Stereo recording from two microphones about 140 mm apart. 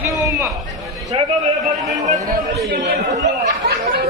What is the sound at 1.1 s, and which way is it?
Speech, 40° right (ahead or behind).